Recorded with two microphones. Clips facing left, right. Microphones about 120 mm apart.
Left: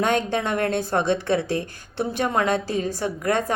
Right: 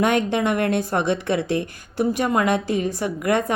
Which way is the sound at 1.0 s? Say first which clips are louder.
Even; 60° right (ahead or behind).